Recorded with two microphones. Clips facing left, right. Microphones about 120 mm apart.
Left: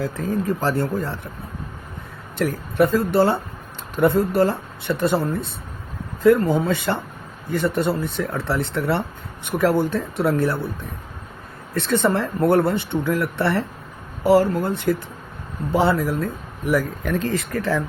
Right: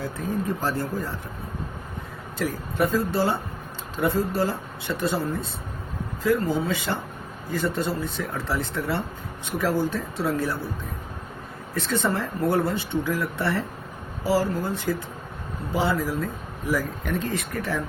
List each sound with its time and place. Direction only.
0.0 s speech: 90° left; by 1.1 s 75° left (ahead or behind)
2.4 s speech: 65° left (ahead or behind)
6.7 s speech: 65° left (ahead or behind)
11.7 s speech: 65° left (ahead or behind); by 17.8 s 90° left